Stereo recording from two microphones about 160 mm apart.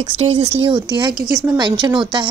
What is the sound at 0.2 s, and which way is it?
A woman's voice, 35° right (ahead or behind).